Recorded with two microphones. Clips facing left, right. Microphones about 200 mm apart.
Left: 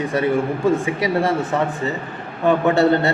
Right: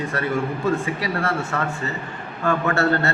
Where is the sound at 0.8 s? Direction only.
15° left (ahead or behind).